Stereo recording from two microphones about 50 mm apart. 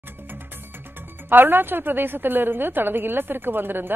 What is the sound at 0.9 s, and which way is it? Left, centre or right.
Speech, right.